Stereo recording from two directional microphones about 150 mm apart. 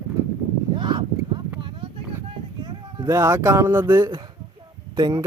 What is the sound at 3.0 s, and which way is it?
Speech, 20° right (ahead or behind).